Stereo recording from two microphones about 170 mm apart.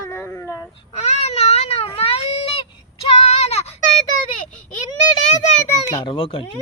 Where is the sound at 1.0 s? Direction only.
40° left (ahead or behind).